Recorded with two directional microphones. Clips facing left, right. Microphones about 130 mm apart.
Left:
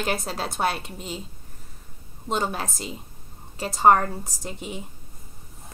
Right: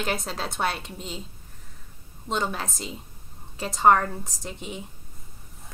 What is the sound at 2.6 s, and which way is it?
A woman's voice, 5° left (ahead or behind).